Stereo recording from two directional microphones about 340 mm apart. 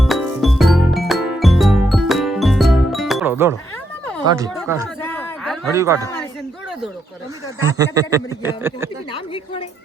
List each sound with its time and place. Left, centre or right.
0.0 s music: centre
4.3 s speech: centre
5.0 s a sound: centre
7.6 s speech: centre
9.1 s speech: centre